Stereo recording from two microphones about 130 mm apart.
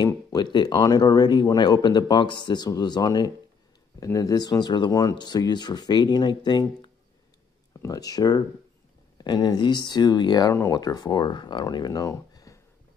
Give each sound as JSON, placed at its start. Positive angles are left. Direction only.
{"t": 0.0, "sound": "speech", "side_deg": 35}